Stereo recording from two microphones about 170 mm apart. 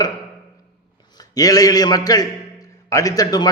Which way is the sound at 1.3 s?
20° left (ahead or behind).